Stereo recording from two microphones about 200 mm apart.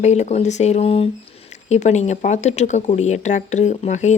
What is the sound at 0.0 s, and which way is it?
Speech, 35° left (ahead or behind).